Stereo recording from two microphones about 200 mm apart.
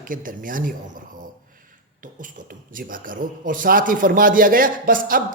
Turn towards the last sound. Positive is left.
turn(degrees=-45)  # may be behind; listen again after turning